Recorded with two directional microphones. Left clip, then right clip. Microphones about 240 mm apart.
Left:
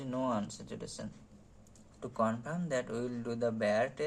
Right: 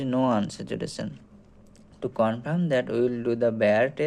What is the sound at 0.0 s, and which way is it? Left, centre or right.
Speech, right.